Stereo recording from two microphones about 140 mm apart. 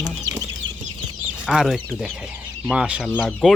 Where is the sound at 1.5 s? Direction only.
5° right (ahead or behind).